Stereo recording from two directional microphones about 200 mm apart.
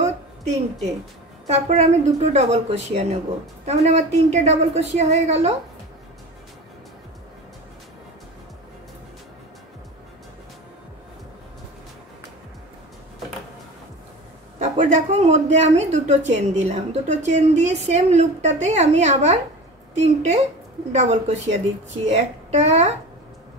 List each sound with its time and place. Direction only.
1.5 s a woman's voice: 35° right (ahead or behind)
14.6 s a woman's voice: 35° right (ahead or behind)